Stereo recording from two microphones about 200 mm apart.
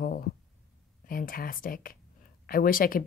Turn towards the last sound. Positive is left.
turn(degrees=45)  # may be behind; listen again after turning